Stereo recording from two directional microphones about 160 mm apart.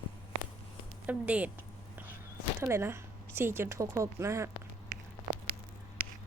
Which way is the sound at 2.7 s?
15° right (ahead or behind).